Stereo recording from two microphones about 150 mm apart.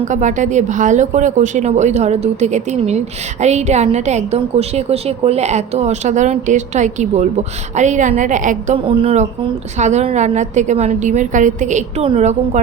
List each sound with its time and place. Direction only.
0.0 s a woman's voice: 55° right (ahead or behind)
8.9 s a woman's voice: 40° right (ahead or behind)